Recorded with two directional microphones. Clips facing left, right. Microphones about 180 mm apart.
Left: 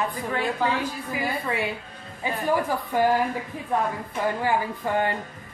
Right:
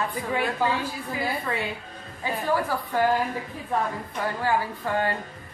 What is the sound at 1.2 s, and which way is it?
A woman's voice, 15° left (ahead or behind).